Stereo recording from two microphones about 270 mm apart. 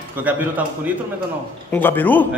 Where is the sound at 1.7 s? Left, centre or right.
Centre.